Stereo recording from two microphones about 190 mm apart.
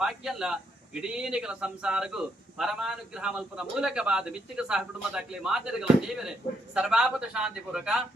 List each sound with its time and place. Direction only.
0.0 s a man's voice: centre (ahead or behind)